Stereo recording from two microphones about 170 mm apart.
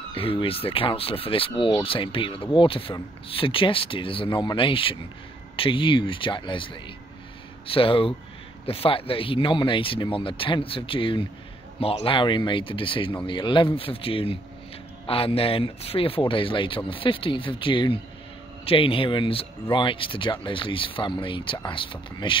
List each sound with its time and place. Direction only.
0.1 s speech: 30° left (ahead or behind)